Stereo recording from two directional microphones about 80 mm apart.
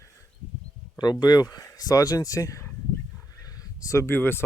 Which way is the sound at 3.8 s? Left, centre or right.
Left.